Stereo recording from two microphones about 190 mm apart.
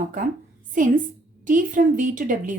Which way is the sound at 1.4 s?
45° right (ahead or behind).